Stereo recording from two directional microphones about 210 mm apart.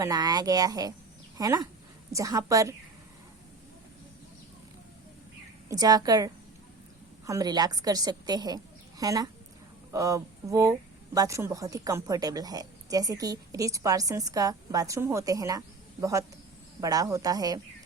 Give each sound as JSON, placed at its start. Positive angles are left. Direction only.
{"t": 0.0, "sound": "a woman's voice", "side_deg": -20}
{"t": 5.6, "sound": "a woman's voice", "side_deg": -15}